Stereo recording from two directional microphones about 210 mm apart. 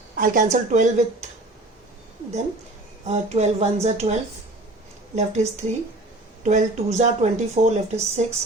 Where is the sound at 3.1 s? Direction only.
30° right (ahead or behind).